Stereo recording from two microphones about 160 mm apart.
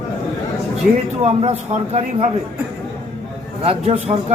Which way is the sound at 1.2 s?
40° right (ahead or behind).